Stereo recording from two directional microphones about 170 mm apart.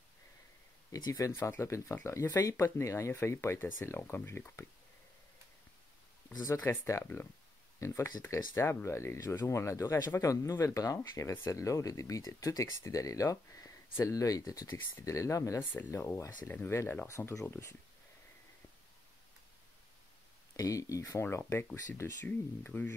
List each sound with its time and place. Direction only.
0.9 s speech: 20° left (ahead or behind)
6.4 s speech: 20° left (ahead or behind)
20.5 s speech: 20° left (ahead or behind)